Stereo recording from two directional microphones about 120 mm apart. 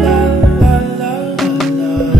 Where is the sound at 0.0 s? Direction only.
Centre (ahead or behind).